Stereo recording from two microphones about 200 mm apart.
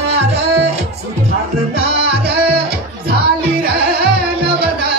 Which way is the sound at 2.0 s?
55° right (ahead or behind).